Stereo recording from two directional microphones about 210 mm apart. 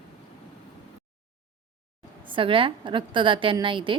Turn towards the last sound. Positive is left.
turn(degrees=-25)  # may be behind; listen again after turning